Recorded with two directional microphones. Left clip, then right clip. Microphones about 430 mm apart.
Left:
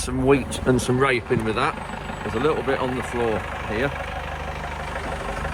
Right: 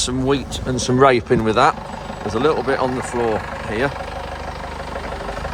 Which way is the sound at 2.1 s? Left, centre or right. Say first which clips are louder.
Right 5 dB; centre.